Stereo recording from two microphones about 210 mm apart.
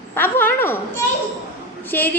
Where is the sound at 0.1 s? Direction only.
10° left (ahead or behind).